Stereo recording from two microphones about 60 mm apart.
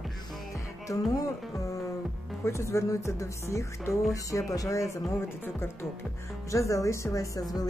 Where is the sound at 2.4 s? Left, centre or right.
Left.